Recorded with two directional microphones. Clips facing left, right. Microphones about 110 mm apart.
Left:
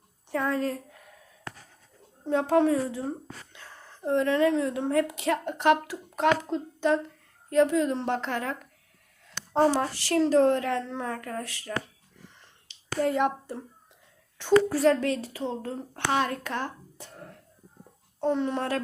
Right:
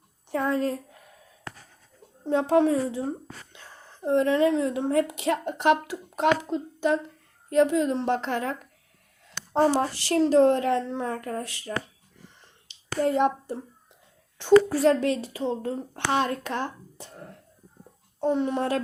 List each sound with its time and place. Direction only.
0.3 s a woman's voice: 20° right (ahead or behind)
2.2 s a woman's voice: 20° right (ahead or behind)
9.7 s a woman's voice: 20° right (ahead or behind)
13.0 s a woman's voice: 25° right (ahead or behind)
18.2 s speech: 15° right (ahead or behind)